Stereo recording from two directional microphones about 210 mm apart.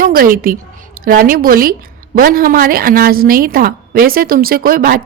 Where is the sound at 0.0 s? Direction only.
45° right (ahead or behind).